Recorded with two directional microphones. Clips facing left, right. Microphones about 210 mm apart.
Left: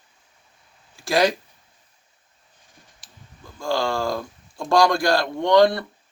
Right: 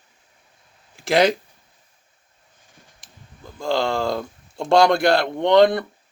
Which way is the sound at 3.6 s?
20° right (ahead or behind).